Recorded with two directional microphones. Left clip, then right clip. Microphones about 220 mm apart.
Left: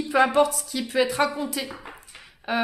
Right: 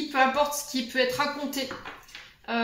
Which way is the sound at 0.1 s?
50° left (ahead or behind).